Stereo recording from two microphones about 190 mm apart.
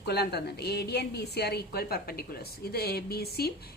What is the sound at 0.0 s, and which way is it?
A woman's voice, 60° left (ahead or behind).